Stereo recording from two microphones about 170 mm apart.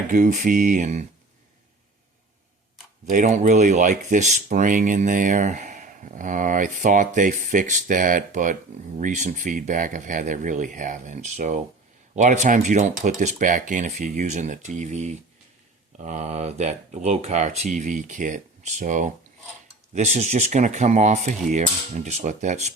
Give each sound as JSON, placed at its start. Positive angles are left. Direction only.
{"t": 0.1, "sound": "speech", "side_deg": -50}
{"t": 3.1, "sound": "speech", "side_deg": -45}